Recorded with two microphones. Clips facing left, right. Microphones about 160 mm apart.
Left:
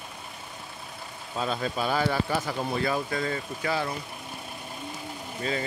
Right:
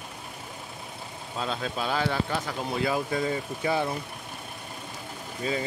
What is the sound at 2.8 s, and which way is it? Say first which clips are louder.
Speech: right 5 dB; 10° right (ahead or behind).